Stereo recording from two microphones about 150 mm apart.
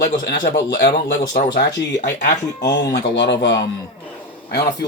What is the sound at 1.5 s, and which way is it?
Speech, 90° left.